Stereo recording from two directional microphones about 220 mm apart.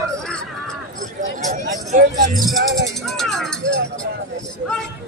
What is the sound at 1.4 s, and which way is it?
Speech, 35° right (ahead or behind).